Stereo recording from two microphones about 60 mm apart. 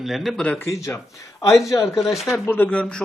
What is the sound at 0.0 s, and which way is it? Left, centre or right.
Speech, centre.